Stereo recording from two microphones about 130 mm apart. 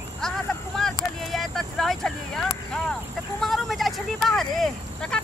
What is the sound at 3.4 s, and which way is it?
Vehicle, centre (ahead or behind).